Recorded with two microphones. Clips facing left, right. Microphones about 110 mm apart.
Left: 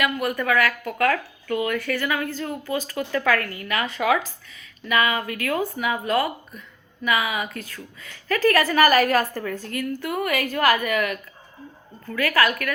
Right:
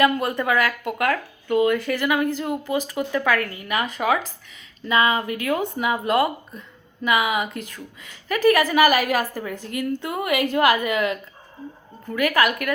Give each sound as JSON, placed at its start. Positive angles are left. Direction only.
{"t": 0.0, "sound": "a woman's voice", "side_deg": -25}
{"t": 4.9, "sound": "a woman's voice", "side_deg": -25}